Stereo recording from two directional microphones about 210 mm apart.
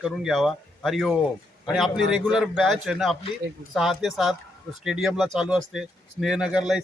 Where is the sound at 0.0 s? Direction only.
Centre (ahead or behind).